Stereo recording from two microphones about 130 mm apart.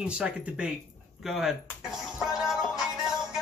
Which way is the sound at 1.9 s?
Centre (ahead or behind).